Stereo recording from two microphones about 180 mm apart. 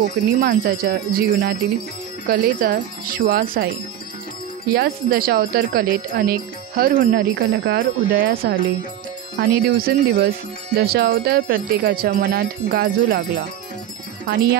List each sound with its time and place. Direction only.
0.0 s speech: 60° right (ahead or behind)
2.2 s speech: 50° right (ahead or behind)
4.7 s speech: 60° right (ahead or behind)
9.4 s speech: 70° right (ahead or behind)